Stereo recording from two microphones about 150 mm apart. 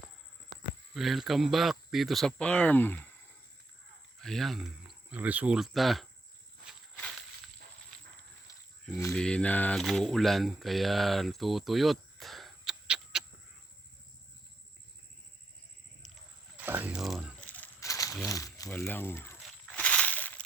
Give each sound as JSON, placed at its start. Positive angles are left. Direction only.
{"t": 0.9, "sound": "speech", "side_deg": 0}
{"t": 4.2, "sound": "speech", "side_deg": 0}
{"t": 8.5, "sound": "a sound", "side_deg": 20}
{"t": 9.1, "sound": "speech", "side_deg": 5}
{"t": 16.6, "sound": "a sound", "side_deg": -10}
{"t": 17.4, "sound": "coin", "side_deg": 10}
{"t": 17.8, "sound": "crumpling", "side_deg": 20}
{"t": 18.3, "sound": "a sound", "side_deg": 20}
{"t": 18.7, "sound": "speech", "side_deg": 15}
{"t": 19.6, "sound": "crushing", "side_deg": 10}